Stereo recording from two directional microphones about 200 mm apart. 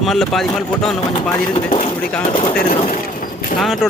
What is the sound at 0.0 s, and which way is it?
Speech, centre (ahead or behind).